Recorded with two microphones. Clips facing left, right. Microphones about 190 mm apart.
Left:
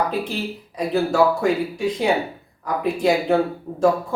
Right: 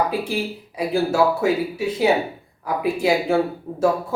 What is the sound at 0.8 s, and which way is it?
Speech, 5° right (ahead or behind).